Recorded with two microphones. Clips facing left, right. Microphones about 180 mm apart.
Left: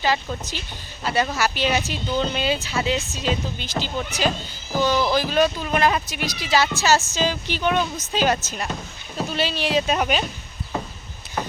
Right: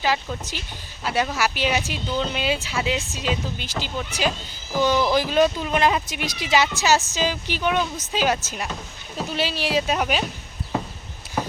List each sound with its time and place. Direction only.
0.0 s speech: 10° right (ahead or behind)
4.8 s speech: 20° right (ahead or behind)